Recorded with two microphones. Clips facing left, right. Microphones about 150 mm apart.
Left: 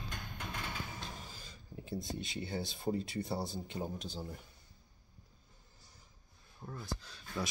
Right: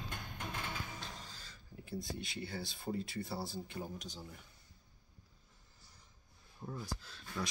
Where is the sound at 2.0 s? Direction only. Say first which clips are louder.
Even; 20° left (ahead or behind).